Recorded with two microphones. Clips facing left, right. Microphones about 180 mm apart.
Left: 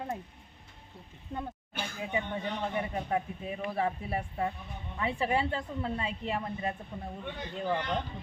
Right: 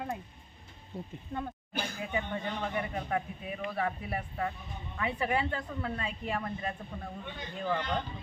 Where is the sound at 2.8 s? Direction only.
25° left (ahead or behind).